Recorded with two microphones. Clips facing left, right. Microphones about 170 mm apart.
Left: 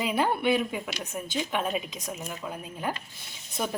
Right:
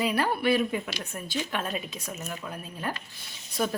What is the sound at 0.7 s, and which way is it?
Speech, 5° left (ahead or behind).